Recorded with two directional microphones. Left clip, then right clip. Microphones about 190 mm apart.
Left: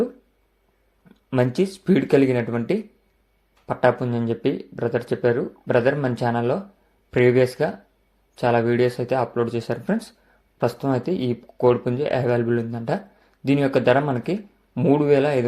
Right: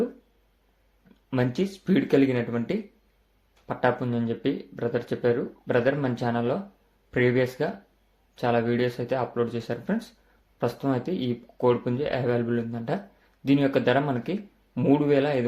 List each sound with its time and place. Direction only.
1.3 s speech: 25° left (ahead or behind)